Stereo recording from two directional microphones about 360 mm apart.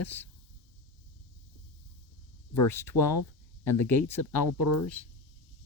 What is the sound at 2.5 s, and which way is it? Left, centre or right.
Speech, centre.